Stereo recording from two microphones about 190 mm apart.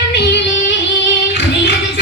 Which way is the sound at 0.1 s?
65° left (ahead or behind).